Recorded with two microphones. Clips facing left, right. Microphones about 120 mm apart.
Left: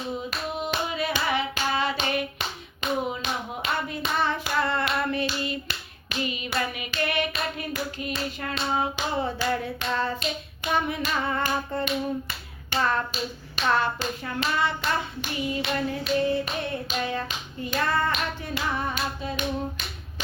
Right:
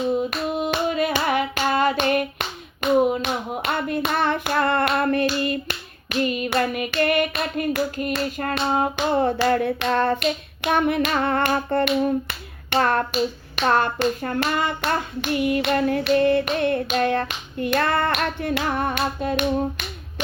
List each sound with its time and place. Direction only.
0.3 s hands: 50° right (ahead or behind)